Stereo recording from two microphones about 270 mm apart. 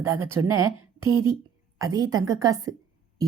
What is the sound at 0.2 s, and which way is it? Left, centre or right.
Speech, right.